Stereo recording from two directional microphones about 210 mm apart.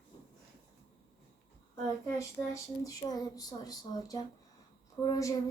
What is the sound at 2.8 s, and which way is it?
Speech, 15° left (ahead or behind).